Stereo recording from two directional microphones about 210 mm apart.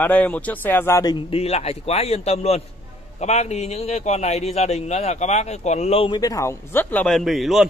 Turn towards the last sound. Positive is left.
turn(degrees=0)  # may be behind; listen again after turning